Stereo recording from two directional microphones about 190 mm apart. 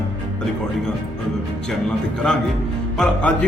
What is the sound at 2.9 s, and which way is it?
Speech, 5° left (ahead or behind).